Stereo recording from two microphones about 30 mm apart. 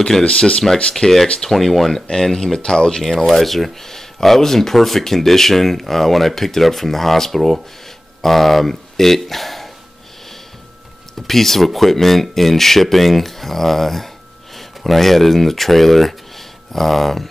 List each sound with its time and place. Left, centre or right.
0.2 s speech: left
1.4 s speech: centre
2.0 s speech: centre
2.6 s speech: left
3.0 s speech: centre
11.2 s speech: centre